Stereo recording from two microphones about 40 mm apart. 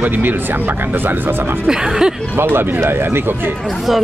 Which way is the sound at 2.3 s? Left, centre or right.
Right.